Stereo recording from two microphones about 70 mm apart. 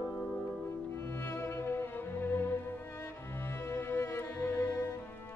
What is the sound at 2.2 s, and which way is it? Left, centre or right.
Music, left.